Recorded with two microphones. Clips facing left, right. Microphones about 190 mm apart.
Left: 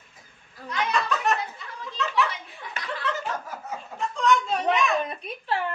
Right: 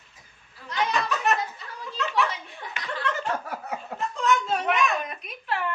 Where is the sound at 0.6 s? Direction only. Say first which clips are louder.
Left 4 dB; 45° left (ahead or behind).